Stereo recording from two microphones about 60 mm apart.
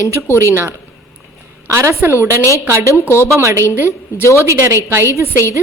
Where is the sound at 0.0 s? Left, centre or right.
Right.